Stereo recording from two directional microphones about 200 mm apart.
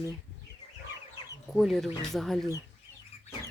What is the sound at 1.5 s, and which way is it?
Speech, centre (ahead or behind).